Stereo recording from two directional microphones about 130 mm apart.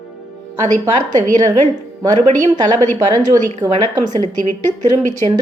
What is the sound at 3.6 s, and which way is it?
Speech, 20° right (ahead or behind).